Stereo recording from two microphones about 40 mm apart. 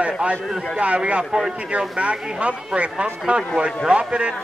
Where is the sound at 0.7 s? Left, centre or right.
Right.